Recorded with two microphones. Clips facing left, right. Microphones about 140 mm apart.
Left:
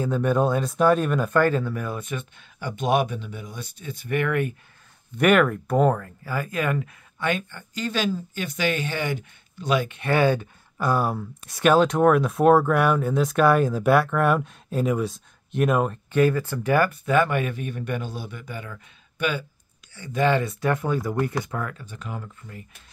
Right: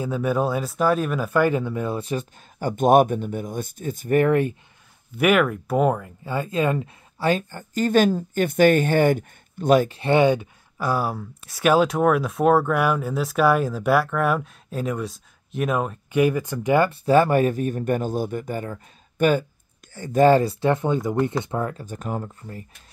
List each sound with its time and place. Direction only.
0.0 s speech: 5° right (ahead or behind); by 4.6 s 30° right (ahead or behind)
5.1 s speech: 5° right (ahead or behind)
6.2 s speech: 25° right (ahead or behind); by 9.9 s 45° right (ahead or behind)
9.9 s speech: 25° right (ahead or behind)
10.8 s speech: 5° right (ahead or behind)
16.1 s speech: 15° right (ahead or behind); by 21.8 s 30° right (ahead or behind)
21.8 s speech: 45° right (ahead or behind)